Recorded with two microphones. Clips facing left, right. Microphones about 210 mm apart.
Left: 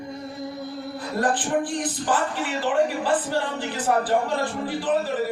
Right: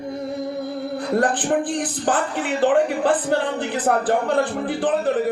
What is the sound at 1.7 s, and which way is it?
Speech, 55° right (ahead or behind).